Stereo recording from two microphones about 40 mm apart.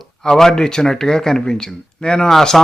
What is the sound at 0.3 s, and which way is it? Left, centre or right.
A man's voice, centre.